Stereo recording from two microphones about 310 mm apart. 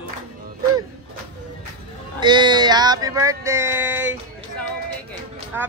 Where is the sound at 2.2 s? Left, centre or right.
Centre.